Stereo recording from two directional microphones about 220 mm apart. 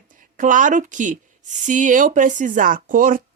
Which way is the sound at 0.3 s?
35° right (ahead or behind).